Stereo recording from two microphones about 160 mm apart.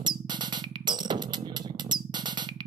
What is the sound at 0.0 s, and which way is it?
Music, 25° right (ahead or behind).